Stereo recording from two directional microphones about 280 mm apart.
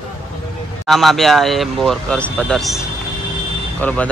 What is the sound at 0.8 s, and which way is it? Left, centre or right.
Speech, centre.